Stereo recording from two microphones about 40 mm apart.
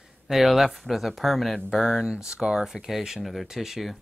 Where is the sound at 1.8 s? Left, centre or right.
Centre.